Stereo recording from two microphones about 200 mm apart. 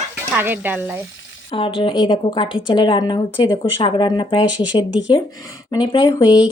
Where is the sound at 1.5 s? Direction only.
25° left (ahead or behind).